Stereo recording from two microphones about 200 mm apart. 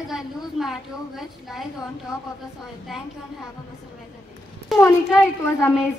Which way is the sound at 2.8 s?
Centre (ahead or behind).